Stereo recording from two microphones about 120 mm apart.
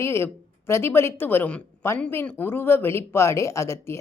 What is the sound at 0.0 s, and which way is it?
Speech, 20° left (ahead or behind).